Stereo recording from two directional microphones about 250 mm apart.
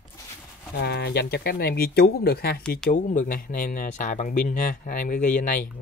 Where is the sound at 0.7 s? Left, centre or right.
Left.